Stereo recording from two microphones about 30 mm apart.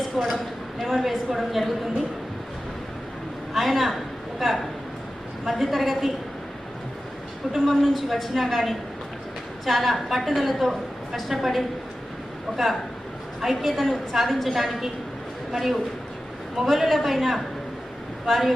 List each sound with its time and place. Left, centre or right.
0.2 s a woman's voice: centre
3.5 s a woman's voice: centre
5.5 s a woman's voice: centre
7.4 s a woman's voice: right
7.8 s a woman's voice: centre
13.4 s a woman's voice: centre